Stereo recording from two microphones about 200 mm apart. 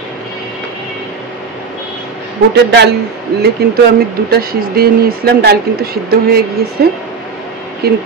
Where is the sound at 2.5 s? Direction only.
55° right (ahead or behind).